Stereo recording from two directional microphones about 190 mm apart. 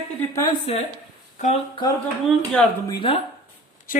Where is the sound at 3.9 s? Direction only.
50° left (ahead or behind).